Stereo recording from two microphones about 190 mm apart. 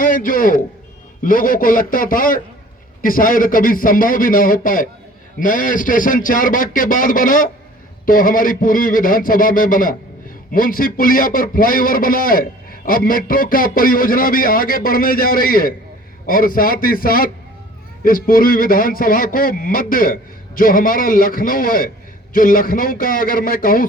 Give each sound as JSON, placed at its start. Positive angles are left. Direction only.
{"t": 0.0, "sound": "a man's voice", "side_deg": 45}